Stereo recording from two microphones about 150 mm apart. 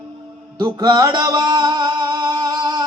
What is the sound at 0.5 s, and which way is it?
Music, 25° right (ahead or behind).